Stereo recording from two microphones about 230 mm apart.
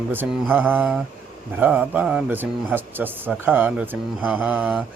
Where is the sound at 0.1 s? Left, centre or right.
Centre.